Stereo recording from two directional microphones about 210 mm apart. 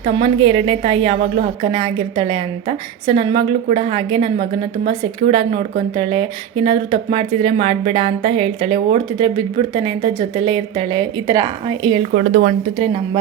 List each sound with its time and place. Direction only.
0.0 s speech: 25° right (ahead or behind)
12.1 s a woman's voice: 40° right (ahead or behind)